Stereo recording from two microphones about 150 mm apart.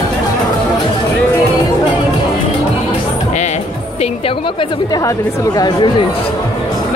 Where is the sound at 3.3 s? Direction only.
50° left (ahead or behind); by 5.0 s 35° left (ahead or behind).